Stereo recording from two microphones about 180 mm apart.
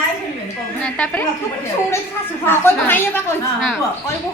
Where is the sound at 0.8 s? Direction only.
5° left (ahead or behind).